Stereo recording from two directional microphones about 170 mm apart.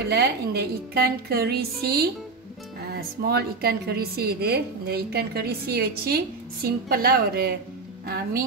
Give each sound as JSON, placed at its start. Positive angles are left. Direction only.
{"t": 0.1, "sound": "a woman's voice", "side_deg": -70}